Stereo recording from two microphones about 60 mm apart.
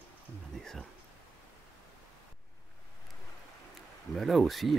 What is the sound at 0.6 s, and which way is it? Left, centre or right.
Speech, centre.